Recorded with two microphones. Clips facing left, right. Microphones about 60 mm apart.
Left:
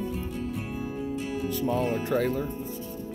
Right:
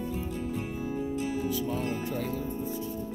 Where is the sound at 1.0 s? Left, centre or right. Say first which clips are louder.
Right 1 dB; left.